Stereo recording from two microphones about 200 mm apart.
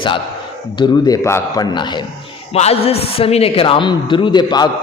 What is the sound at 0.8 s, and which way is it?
A man's voice, 20° left (ahead or behind).